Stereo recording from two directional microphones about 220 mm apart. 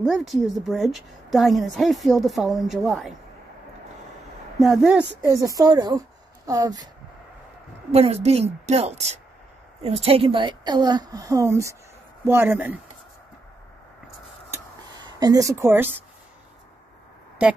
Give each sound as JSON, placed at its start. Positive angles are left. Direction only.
{"t": 0.0, "sound": "a woman's voice", "side_deg": 0}
{"t": 4.6, "sound": "a woman's voice", "side_deg": 0}
{"t": 7.9, "sound": "a woman's voice", "side_deg": -30}
{"t": 15.1, "sound": "a woman's voice", "side_deg": -15}